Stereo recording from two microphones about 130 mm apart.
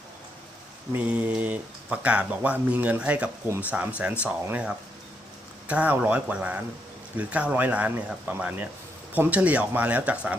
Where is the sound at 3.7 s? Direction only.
10° right (ahead or behind).